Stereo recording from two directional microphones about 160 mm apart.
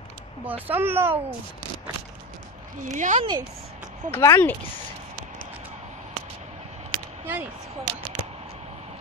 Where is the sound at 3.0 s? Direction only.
50° right (ahead or behind).